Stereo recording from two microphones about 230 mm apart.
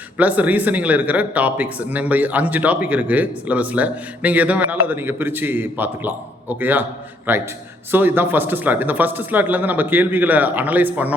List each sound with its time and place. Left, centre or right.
0.2 s speech: centre